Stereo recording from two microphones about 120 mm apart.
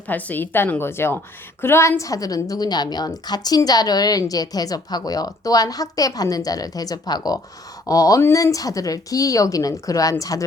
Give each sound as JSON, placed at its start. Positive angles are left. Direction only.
{"t": 0.1, "sound": "a woman's voice", "side_deg": 15}